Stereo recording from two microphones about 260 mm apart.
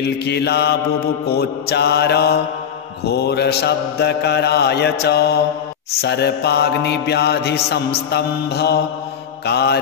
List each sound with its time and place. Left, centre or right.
0.0 s mantra: left